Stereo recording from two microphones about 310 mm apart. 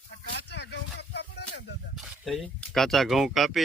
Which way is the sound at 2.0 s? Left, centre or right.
Centre.